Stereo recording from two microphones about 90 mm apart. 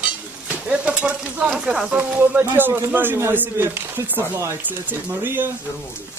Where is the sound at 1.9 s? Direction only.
20° right (ahead or behind).